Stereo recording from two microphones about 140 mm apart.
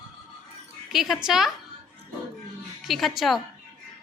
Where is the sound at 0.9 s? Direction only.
Centre (ahead or behind).